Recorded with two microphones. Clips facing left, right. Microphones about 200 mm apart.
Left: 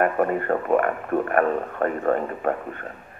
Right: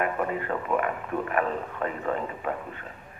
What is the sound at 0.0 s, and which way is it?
Speech, 50° left (ahead or behind).